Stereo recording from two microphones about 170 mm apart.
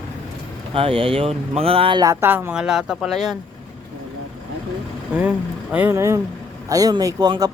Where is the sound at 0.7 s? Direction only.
35° right (ahead or behind).